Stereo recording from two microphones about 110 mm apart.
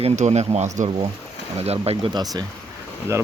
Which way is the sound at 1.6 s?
70° right (ahead or behind).